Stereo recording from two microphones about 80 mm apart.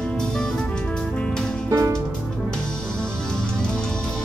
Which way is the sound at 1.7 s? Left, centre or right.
Right.